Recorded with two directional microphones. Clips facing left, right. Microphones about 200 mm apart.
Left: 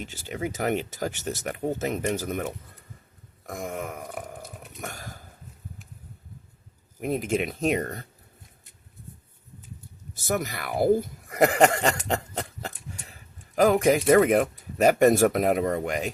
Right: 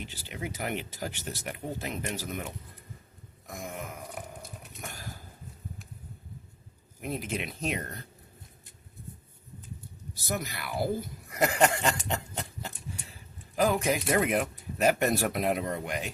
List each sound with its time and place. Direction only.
0.0 s speech: 45° left (ahead or behind)
3.4 s burping: 50° left (ahead or behind)
4.8 s speech: 50° left (ahead or behind)
7.0 s speech: 50° left (ahead or behind)
10.2 s speech: 50° left (ahead or behind)
13.6 s speech: 50° left (ahead or behind)